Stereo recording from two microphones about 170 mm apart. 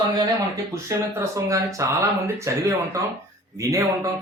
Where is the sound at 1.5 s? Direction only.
20° right (ahead or behind).